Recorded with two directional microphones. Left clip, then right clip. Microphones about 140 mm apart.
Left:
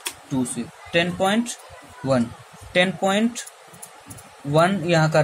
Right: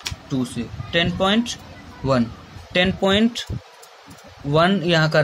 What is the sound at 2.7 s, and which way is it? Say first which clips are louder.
Speech: right 1 dB; 20° right (ahead or behind).